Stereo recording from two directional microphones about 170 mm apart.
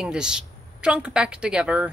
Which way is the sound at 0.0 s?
5° right (ahead or behind).